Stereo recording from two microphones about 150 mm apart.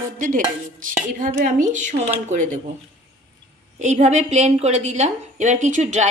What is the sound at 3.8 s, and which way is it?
A woman's voice, 50° right (ahead or behind).